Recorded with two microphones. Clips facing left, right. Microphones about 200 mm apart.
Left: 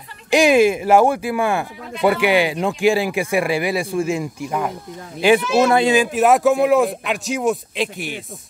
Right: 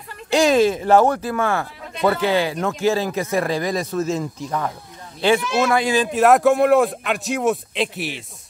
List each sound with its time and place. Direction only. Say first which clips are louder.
0.3 s speech: left 2 dB; 15° left (ahead or behind)
5.6 s a man's voice: left 4 dB; 25° left (ahead or behind)
6.1 s speech: right 4 dB; centre (ahead or behind)